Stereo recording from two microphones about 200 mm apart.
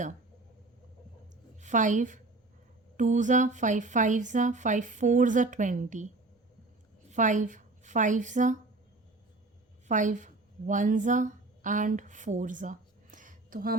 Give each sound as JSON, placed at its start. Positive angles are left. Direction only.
{"t": 1.6, "sound": "a woman's voice", "side_deg": -40}
{"t": 7.1, "sound": "a woman's voice", "side_deg": -40}
{"t": 9.8, "sound": "a woman's voice", "side_deg": -40}